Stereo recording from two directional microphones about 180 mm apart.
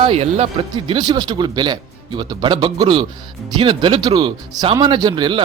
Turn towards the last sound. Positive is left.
turn(degrees=-25)  # may be behind; listen again after turning